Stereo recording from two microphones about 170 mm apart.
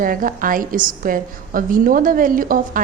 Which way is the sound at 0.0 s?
55° right (ahead or behind).